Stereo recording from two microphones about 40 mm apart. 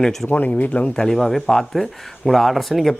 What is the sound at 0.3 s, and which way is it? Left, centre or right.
Speech, left.